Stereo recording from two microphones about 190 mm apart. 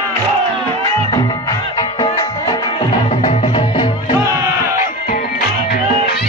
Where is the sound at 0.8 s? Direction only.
20° left (ahead or behind).